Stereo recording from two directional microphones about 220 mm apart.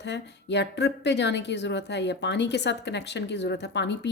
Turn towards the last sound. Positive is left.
turn(degrees=50)  # may be behind; listen again after turning